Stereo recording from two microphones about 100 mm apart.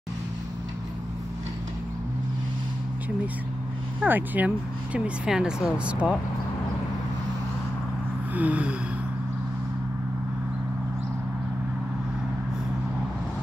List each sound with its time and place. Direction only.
4.0 s speech: 15° right (ahead or behind)
8.4 s speech: 15° right (ahead or behind)